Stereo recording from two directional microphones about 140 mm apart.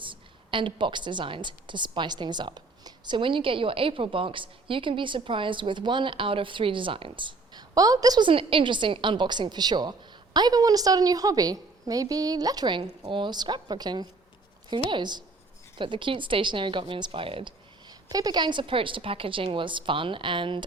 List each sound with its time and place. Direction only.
0.0 s a woman's voice: 35° right (ahead or behind)
8.3 s a woman's voice: 40° right (ahead or behind)